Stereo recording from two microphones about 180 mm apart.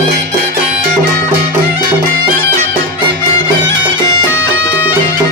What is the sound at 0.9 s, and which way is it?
Music, 60° right (ahead or behind).